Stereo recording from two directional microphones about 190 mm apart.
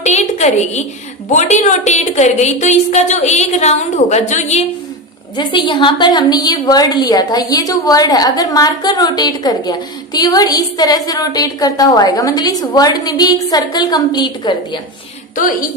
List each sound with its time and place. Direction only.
0.0 s a sound: 35° left (ahead or behind)
1.3 s a woman's voice: 40° left (ahead or behind)
5.3 s a woman's voice: 25° left (ahead or behind)